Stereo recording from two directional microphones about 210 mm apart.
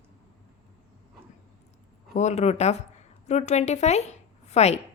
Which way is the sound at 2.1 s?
30° left (ahead or behind).